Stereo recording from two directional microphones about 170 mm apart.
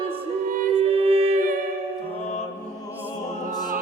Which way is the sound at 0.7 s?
35° right (ahead or behind).